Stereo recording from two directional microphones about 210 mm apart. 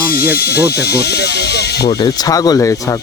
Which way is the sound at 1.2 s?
50° left (ahead or behind).